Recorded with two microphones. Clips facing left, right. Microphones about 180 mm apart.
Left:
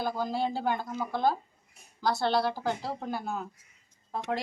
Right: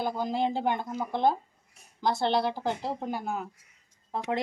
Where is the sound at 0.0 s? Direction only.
20° right (ahead or behind).